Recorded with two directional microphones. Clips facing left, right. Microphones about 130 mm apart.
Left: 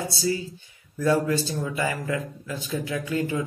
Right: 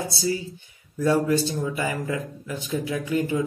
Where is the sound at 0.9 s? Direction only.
25° right (ahead or behind).